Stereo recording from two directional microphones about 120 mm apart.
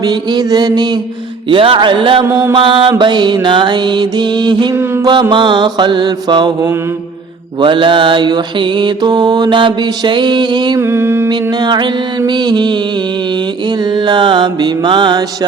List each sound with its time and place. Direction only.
0.0 s mantra: 35° right (ahead or behind)
1.5 s mantra: 45° right (ahead or behind)
10.8 s mantra: 20° right (ahead or behind)
11.3 s mantra: 35° right (ahead or behind)
13.9 s mantra: 40° right (ahead or behind)